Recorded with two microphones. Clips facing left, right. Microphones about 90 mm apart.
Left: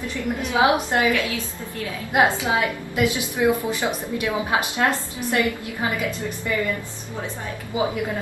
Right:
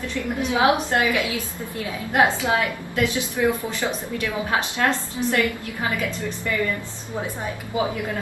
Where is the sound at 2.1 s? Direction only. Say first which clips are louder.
Even; 15° left (ahead or behind).